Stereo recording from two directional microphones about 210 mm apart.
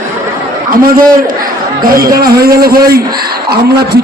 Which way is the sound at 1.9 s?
45° right (ahead or behind).